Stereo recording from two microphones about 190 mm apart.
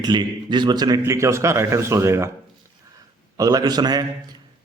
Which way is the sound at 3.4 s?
20° right (ahead or behind).